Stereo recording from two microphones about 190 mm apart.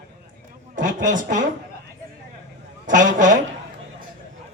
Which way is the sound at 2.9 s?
40° right (ahead or behind).